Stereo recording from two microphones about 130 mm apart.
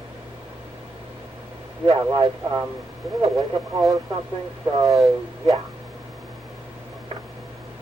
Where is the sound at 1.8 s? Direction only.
40° right (ahead or behind).